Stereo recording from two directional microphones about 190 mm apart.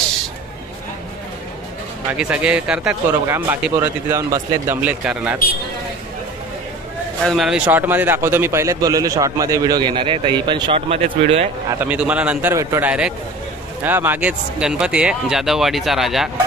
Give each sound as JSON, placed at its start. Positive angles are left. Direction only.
{"t": 2.1, "sound": "a man's voice", "side_deg": -5}
{"t": 7.2, "sound": "a man's voice", "side_deg": 0}
{"t": 11.8, "sound": "a man's voice", "side_deg": -5}